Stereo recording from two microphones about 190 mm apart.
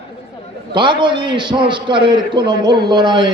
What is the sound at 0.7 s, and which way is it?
A man's voice, 25° right (ahead or behind).